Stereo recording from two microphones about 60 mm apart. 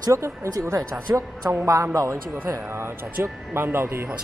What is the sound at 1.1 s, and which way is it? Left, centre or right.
Speech, right.